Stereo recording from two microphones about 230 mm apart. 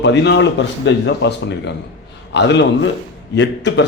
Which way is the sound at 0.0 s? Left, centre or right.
Left.